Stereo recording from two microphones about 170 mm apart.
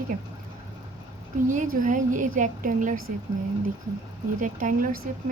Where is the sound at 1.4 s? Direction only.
50° right (ahead or behind).